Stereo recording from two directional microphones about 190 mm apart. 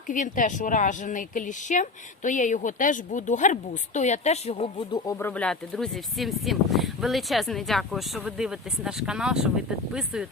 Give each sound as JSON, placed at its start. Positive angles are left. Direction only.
{"t": 0.1, "sound": "speech", "side_deg": 45}
{"t": 5.2, "sound": "speech", "side_deg": 5}